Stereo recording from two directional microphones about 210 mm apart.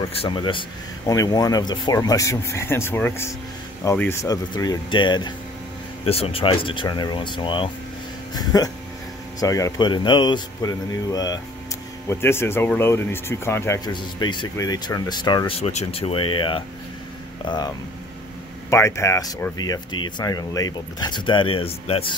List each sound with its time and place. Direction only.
0.2 s speech: 25° left (ahead or behind)